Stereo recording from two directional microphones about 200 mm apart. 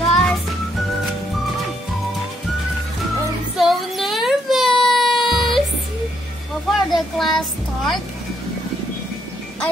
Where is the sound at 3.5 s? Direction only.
Centre (ahead or behind).